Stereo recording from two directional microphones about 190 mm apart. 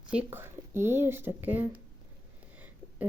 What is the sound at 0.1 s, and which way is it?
Speech, 10° right (ahead or behind).